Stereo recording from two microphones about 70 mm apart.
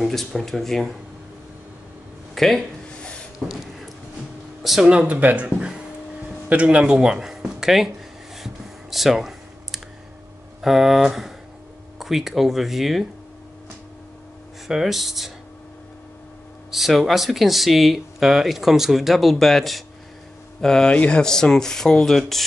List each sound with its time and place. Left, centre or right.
0.0 s speech: centre
2.3 s a sound: centre
4.8 s speech: centre
5.6 s a sound: centre
6.5 s speech: centre
8.9 s computer keyboard: centre
10.6 s speech: centre
14.7 s speech: centre
16.7 s speech: centre
20.6 s rub: centre